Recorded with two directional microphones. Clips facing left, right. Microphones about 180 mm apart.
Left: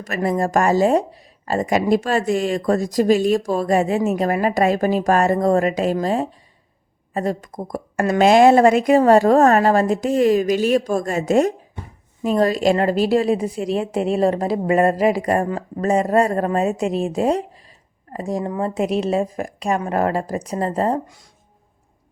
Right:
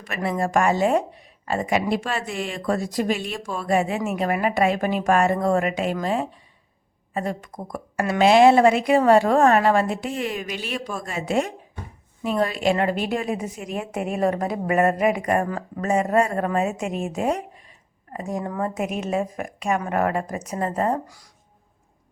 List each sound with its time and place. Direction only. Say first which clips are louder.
0.0 s speech: left 5 dB; 40° left (ahead or behind)